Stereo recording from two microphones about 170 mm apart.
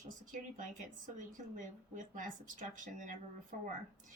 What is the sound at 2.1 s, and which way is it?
A woman's voice, 50° right (ahead or behind).